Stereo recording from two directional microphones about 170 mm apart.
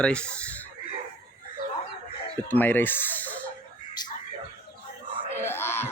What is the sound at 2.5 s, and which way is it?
Speech, 10° left (ahead or behind).